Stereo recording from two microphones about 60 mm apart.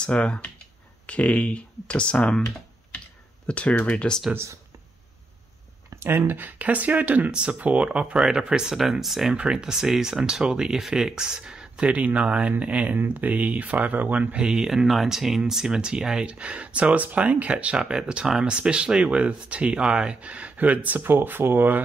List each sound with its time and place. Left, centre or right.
0.0 s speech: centre
3.4 s speech: left
5.9 s speech: right
14.4 s speech: centre; by 21.8 s right